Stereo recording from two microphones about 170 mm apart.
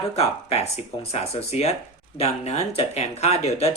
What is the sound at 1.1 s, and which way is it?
Speech, 40° left (ahead or behind).